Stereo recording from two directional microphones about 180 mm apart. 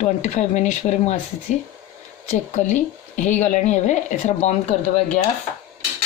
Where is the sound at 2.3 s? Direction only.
45° left (ahead or behind).